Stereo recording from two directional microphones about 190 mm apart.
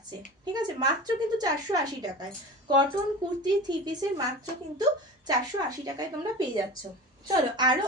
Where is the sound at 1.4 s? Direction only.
20° right (ahead or behind).